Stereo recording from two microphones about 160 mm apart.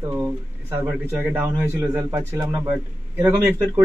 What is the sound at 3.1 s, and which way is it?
Speech, 15° right (ahead or behind).